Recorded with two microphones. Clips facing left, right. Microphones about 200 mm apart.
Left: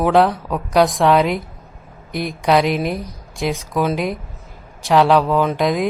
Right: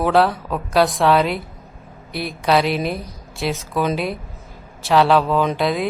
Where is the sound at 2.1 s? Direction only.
15° left (ahead or behind).